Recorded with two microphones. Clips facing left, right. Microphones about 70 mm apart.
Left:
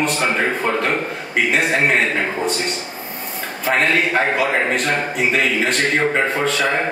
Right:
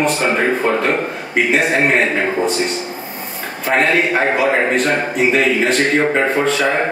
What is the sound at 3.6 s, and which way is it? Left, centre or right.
Speech, centre.